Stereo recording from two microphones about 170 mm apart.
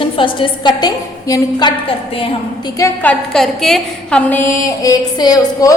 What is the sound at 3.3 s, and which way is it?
A woman's voice, centre (ahead or behind).